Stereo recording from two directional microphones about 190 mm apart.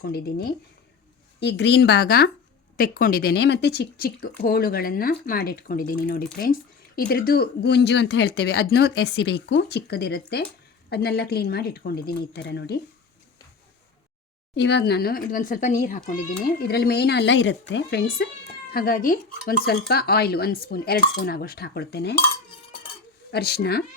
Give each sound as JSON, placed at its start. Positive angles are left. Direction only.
{"t": 0.0, "sound": "speech", "side_deg": 55}
{"t": 14.5, "sound": "speech", "side_deg": 65}
{"t": 23.3, "sound": "speech", "side_deg": 55}